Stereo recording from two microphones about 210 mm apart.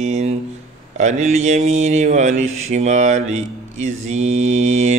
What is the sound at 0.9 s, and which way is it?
Speech, 35° right (ahead or behind).